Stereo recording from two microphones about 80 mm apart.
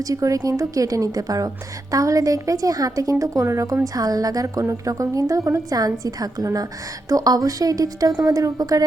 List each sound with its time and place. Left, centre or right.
0.1 s a woman's voice: right
3.9 s a woman's voice: right